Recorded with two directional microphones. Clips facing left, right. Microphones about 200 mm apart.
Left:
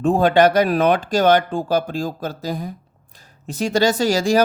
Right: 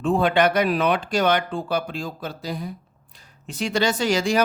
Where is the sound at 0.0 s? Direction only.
40° left (ahead or behind).